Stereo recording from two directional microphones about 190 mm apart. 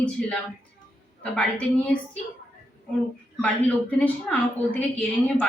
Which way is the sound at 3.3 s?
5° left (ahead or behind).